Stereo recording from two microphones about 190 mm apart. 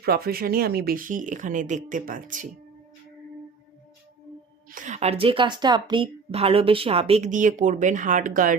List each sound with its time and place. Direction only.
0.0 s speech: 55° right (ahead or behind)
4.7 s a woman's voice: 40° right (ahead or behind)